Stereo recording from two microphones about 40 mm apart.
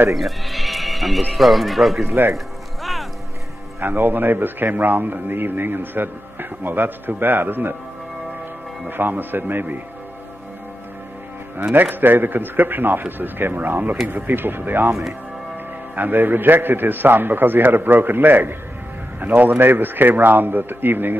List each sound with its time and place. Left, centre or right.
0.1 s speech: centre
2.0 s speech: right
2.3 s music: centre
3.8 s a man's voice: right
8.8 s a man's voice: right
11.7 s a man's voice: right
16.0 s a man's voice: right